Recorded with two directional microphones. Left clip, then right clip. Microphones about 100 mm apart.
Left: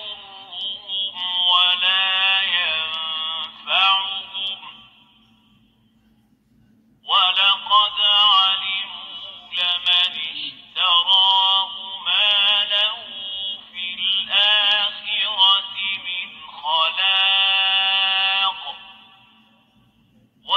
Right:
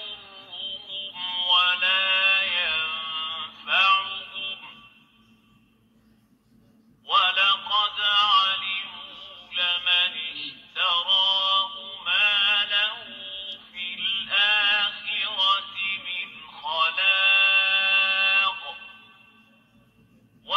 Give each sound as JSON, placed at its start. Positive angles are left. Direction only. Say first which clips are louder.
{"t": 0.0, "sound": "music", "louder": "left 4 dB", "side_deg": 25}
{"t": 7.1, "sound": "music", "louder": "left 4 dB", "side_deg": 30}
{"t": 13.9, "sound": "male singing", "louder": "left 5 dB", "side_deg": 30}